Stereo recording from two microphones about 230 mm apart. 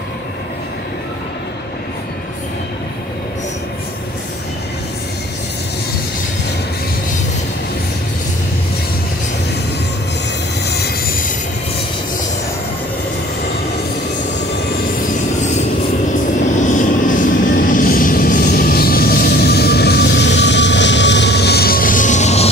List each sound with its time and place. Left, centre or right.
16.6 s vehicle: left